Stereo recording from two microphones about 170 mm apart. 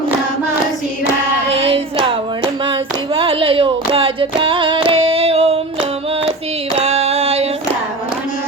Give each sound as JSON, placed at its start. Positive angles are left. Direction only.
{"t": 1.5, "sound": "child singing", "side_deg": -35}
{"t": 3.2, "sound": "female singing", "side_deg": -30}
{"t": 6.7, "sound": "a sound", "side_deg": -40}